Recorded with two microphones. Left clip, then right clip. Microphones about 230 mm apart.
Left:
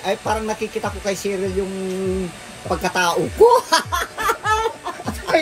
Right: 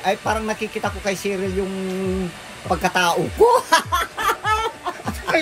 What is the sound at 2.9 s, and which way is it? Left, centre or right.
Speech, right.